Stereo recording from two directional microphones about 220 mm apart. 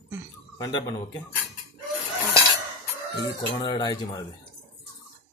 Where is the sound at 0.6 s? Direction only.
20° left (ahead or behind).